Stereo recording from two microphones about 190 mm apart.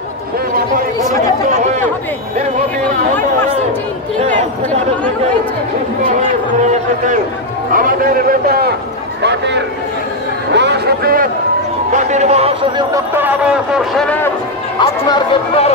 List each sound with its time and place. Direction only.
7.7 s a man's voice: 50° right (ahead or behind)
9.2 s a man's voice: 65° right (ahead or behind)
10.5 s a sound: 65° right (ahead or behind)
11.9 s speech: 40° right (ahead or behind)
12.9 s speech: 10° right (ahead or behind); by 14.3 s 5° left (ahead or behind)
14.8 s speech: 25° left (ahead or behind)